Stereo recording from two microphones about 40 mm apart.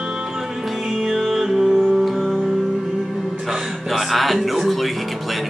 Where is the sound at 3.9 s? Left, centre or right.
Centre.